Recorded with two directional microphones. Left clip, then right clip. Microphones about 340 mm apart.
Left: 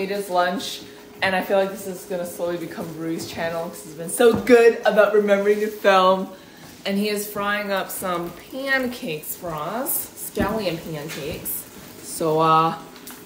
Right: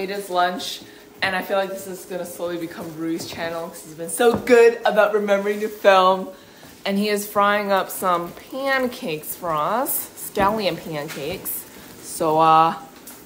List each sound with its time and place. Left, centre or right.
0.0 s a woman's voice: centre
12.2 s a woman's voice: centre